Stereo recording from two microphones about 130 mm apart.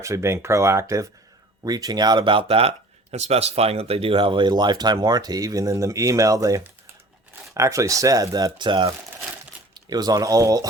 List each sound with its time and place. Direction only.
0.0 s speech: 20° right (ahead or behind)